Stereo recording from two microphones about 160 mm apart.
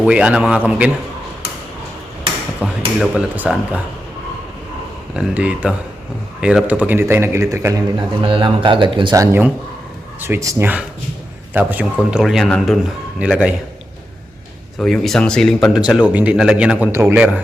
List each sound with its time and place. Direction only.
0.0 s speech: 5° right (ahead or behind)
2.6 s speech: 10° right (ahead or behind)
5.1 s speech: 5° right (ahead or behind)
8.2 s speech: 30° right (ahead or behind); by 13.5 s 5° right (ahead or behind)
14.8 s speech: centre (ahead or behind)